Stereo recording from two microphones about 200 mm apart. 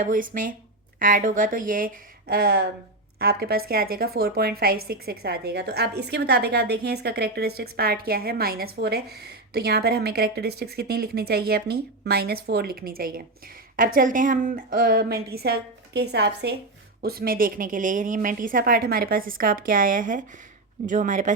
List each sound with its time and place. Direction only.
0.0 s a woman's voice: 40° right (ahead or behind)